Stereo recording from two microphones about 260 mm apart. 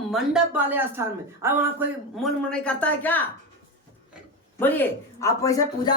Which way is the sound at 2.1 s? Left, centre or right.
Centre.